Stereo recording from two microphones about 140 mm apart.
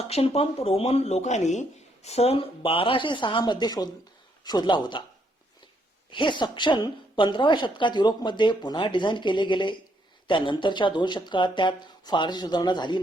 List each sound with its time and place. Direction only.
0.1 s a woman's voice: 45° left (ahead or behind)
6.1 s a woman's voice: 35° left (ahead or behind)